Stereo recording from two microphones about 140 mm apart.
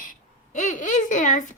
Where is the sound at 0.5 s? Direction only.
60° left (ahead or behind).